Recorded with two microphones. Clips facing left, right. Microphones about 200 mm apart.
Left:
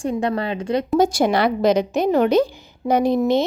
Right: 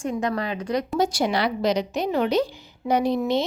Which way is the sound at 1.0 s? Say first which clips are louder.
Left 6 dB; 50° left (ahead or behind).